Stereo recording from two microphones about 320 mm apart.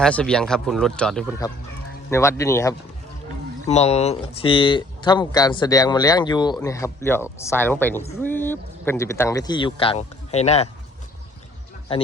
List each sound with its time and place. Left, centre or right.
0.0 s speech: centre
3.7 s speech: centre